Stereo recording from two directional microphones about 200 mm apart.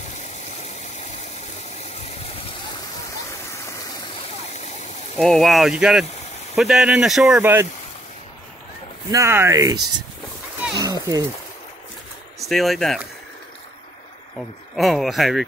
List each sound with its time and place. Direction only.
5.1 s speech: centre (ahead or behind)
9.1 s speech: 15° right (ahead or behind)
10.8 s a sound: 20° right (ahead or behind)
12.4 s speech: centre (ahead or behind)
14.8 s speech: centre (ahead or behind)